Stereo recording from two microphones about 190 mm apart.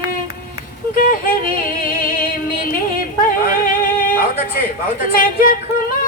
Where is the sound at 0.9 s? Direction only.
50° left (ahead or behind).